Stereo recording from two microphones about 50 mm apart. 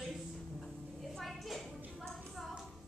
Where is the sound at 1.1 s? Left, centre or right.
Centre.